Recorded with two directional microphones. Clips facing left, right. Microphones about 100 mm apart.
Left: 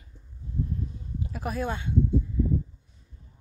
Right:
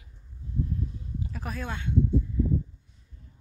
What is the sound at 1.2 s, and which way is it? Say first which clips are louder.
Speech: left 5 dB; 10° left (ahead or behind).